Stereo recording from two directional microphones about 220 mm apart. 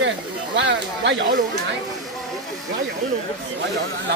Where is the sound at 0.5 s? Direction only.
55° right (ahead or behind).